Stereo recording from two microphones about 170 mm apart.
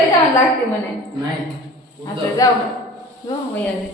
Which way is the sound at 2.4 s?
20° left (ahead or behind).